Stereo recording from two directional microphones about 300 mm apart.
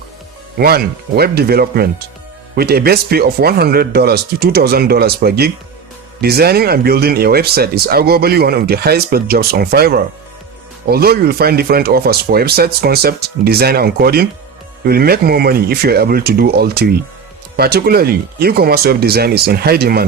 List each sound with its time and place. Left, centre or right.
0.6 s speech: right